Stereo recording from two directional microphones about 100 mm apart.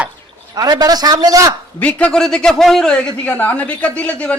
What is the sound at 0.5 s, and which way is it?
A man's voice, 40° right (ahead or behind).